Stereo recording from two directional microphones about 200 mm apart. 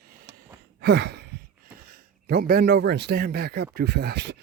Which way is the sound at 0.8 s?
55° right (ahead or behind).